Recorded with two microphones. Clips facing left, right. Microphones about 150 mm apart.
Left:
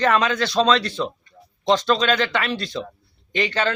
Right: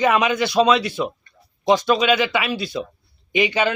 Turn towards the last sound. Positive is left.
turn(degrees=-10)  # may be behind; listen again after turning